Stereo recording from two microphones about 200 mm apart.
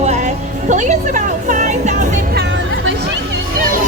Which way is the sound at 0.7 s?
40° right (ahead or behind).